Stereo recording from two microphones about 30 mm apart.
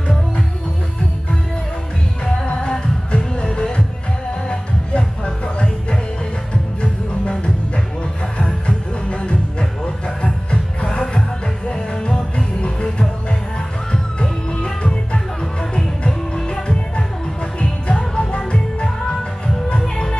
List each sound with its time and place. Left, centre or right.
3.5 s music: left
16.4 s music: left